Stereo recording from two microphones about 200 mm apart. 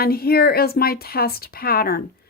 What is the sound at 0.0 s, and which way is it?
A woman's voice, 50° left (ahead or behind).